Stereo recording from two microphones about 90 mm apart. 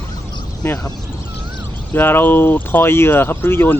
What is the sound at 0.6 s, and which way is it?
Speech, 20° left (ahead or behind).